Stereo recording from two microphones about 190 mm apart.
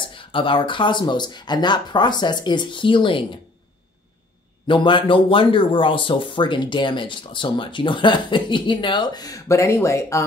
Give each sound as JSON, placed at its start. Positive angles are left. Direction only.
{"t": 0.1, "sound": "speech", "side_deg": 25}
{"t": 4.6, "sound": "speech", "side_deg": 25}